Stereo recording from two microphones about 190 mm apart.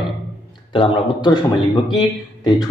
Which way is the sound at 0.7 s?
25° left (ahead or behind).